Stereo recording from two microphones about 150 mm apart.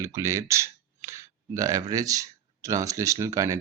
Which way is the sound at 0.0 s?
20° right (ahead or behind).